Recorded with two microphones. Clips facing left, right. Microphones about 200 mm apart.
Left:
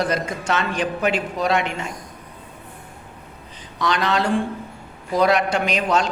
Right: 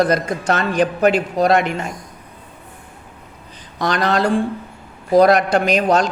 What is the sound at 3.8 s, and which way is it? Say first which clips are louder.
A man's voice: right 3 dB; 40° right (ahead or behind).